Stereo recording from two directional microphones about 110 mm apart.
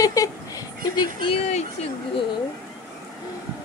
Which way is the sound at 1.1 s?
55° left (ahead or behind).